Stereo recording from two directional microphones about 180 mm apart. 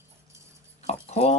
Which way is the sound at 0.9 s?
40° left (ahead or behind).